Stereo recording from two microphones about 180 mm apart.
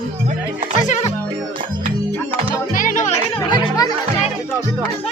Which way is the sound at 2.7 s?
45° left (ahead or behind).